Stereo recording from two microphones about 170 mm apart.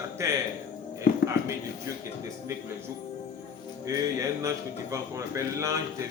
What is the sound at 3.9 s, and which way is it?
Speech, 20° right (ahead or behind).